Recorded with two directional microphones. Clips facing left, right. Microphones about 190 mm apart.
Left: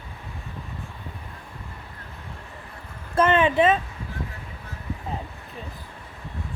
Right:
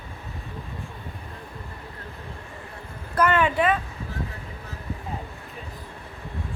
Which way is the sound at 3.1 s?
25° left (ahead or behind).